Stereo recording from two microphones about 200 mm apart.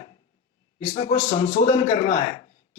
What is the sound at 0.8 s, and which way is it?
A man's voice, 30° left (ahead or behind).